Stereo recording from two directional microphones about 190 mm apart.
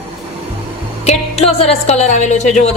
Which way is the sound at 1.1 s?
35° left (ahead or behind).